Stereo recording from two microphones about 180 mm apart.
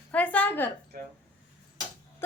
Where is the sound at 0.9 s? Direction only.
55° right (ahead or behind).